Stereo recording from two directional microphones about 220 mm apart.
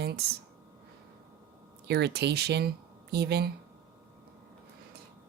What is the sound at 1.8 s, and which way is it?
Speech, 50° right (ahead or behind).